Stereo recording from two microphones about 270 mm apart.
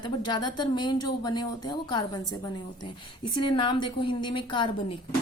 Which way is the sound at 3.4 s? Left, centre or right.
Centre.